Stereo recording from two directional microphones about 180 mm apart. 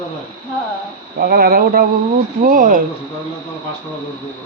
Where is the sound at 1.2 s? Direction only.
55° right (ahead or behind).